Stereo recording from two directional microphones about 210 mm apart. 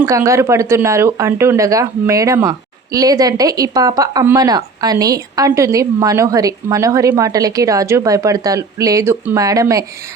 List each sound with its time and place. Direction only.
0.0 s speech: 15° right (ahead or behind)